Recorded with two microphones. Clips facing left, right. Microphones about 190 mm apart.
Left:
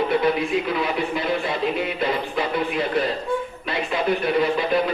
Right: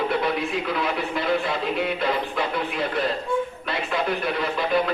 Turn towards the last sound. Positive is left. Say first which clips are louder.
# left 2 dB
turn(degrees=0)  # may be behind; listen again after turning